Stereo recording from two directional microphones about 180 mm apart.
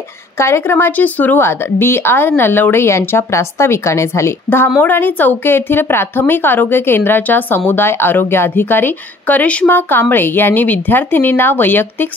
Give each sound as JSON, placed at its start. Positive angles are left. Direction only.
{"t": 0.4, "sound": "speech", "side_deg": 15}